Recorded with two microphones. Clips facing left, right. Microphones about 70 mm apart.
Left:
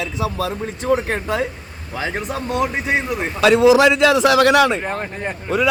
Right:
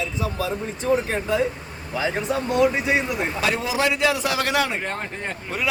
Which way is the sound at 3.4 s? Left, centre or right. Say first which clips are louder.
Left 13 dB; left.